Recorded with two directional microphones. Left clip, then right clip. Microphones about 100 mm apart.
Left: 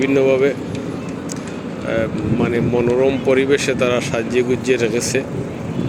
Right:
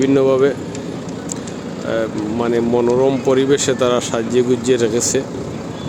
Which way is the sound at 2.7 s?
80° right.